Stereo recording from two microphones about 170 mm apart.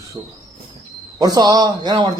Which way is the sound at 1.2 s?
25° right (ahead or behind).